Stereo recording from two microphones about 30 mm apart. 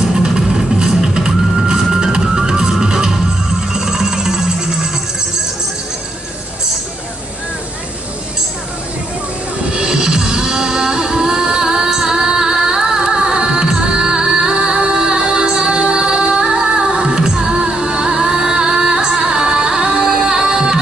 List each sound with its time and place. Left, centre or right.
0.2 s music: right
9.8 s music: right
20.2 s music: right